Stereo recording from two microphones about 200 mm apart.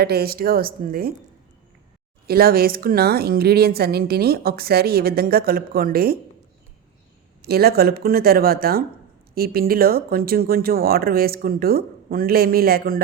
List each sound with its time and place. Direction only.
0.0 s a woman's voice: 50° right (ahead or behind)
2.2 s a woman's voice: 50° right (ahead or behind)
7.4 s a woman's voice: 50° right (ahead or behind)